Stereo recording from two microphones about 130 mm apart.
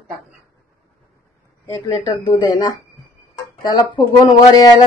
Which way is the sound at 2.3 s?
35° left (ahead or behind).